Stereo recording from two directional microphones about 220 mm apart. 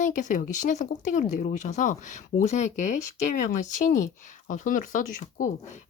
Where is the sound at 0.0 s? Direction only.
35° left (ahead or behind).